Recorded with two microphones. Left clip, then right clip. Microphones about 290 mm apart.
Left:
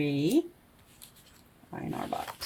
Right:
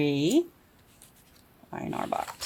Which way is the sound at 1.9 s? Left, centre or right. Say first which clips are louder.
Right 4 dB; centre.